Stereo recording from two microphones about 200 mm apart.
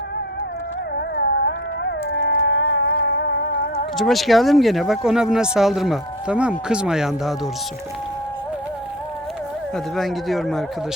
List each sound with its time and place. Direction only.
0.9 s a sound: 60° left (ahead or behind)
2.9 s music: 55° left (ahead or behind)
3.9 s speech: centre (ahead or behind)
9.7 s speech: centre (ahead or behind)